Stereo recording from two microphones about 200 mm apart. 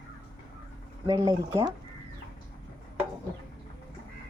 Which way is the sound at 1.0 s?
15° right (ahead or behind).